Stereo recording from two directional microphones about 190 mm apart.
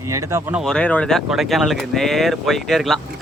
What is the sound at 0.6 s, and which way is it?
Speech, 5° left (ahead or behind).